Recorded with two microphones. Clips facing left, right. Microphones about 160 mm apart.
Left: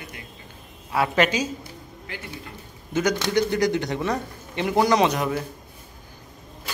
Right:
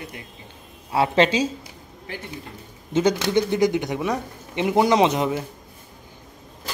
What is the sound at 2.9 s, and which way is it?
A man's voice, 25° right (ahead or behind).